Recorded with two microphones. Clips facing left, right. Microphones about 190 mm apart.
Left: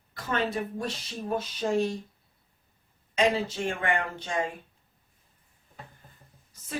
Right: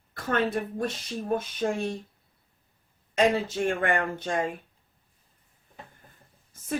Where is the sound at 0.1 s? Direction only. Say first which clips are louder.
Right 3 dB; 55° right (ahead or behind).